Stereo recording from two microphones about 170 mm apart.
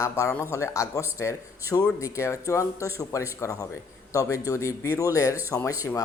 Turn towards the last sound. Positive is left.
turn(degrees=15)  # may be behind; listen again after turning